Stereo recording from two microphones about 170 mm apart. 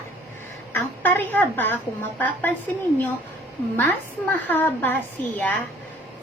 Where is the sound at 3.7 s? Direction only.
10° left (ahead or behind).